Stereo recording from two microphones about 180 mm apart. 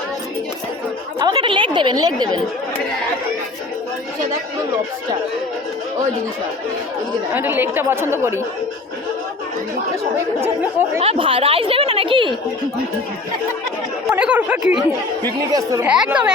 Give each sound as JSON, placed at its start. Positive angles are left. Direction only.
{"t": 1.2, "sound": "a sound", "side_deg": -25}
{"t": 7.3, "sound": "a woman's voice", "side_deg": -10}
{"t": 10.4, "sound": "a woman's voice", "side_deg": -15}
{"t": 11.0, "sound": "a woman's voice", "side_deg": -30}
{"t": 14.1, "sound": "speech", "side_deg": -5}
{"t": 15.5, "sound": "a woman's voice", "side_deg": -20}
{"t": 15.9, "sound": "speech", "side_deg": -5}